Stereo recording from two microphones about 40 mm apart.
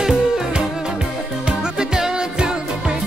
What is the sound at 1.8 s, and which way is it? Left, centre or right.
Music, centre.